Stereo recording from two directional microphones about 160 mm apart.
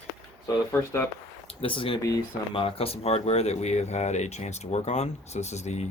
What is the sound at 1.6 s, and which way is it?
Speech, 35° left (ahead or behind).